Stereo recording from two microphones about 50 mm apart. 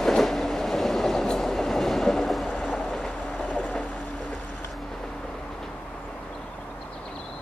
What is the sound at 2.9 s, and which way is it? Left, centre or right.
Train, centre.